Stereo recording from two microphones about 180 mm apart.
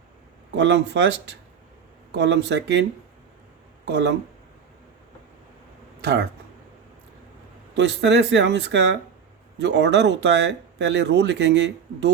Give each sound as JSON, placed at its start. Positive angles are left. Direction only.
{"t": 0.5, "sound": "speech", "side_deg": -75}
{"t": 3.8, "sound": "speech", "side_deg": -70}
{"t": 6.0, "sound": "speech", "side_deg": -65}
{"t": 7.7, "sound": "speech", "side_deg": -75}